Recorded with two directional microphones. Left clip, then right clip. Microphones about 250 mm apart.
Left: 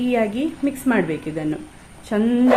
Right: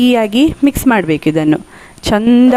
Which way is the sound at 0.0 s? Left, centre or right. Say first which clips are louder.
Right 10 dB; right.